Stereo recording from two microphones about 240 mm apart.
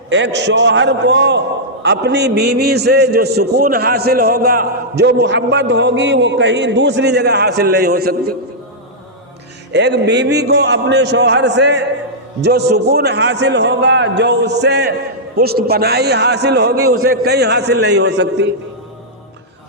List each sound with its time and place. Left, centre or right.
0.1 s a man's voice: right
9.7 s a man's voice: right
16.7 s a man's voice: right
17.0 s a man's voice: right